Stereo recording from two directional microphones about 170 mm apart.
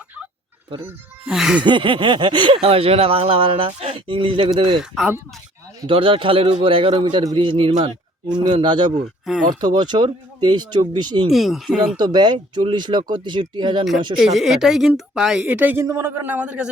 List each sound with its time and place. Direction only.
0.9 s a woman's voice: 5° right (ahead or behind)
1.6 s speech: 30° right (ahead or behind)
4.8 s a woman's voice: 5° right (ahead or behind)
5.9 s speech: 30° right (ahead or behind)
11.3 s a woman's voice: centre (ahead or behind)
11.9 s speech: 25° right (ahead or behind)
14.2 s a woman's voice: centre (ahead or behind)